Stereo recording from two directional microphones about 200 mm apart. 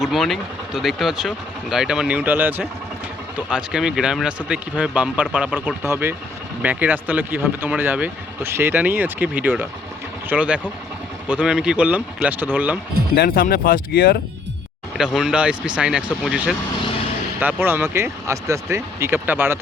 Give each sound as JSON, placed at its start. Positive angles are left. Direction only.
{"t": 0.0, "sound": "speech", "side_deg": 0}
{"t": 13.1, "sound": "speech", "side_deg": 50}
{"t": 14.9, "sound": "speech", "side_deg": -5}